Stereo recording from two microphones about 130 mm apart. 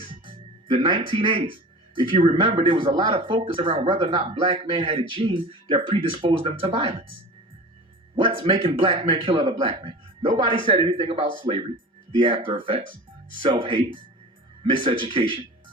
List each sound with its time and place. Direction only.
0.1 s music: 40° right (ahead or behind)
2.0 s speech: 40° right (ahead or behind)
8.1 s a man's voice: 45° right (ahead or behind)